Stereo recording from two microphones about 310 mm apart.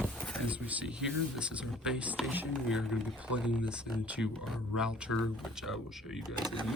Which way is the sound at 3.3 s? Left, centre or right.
Centre.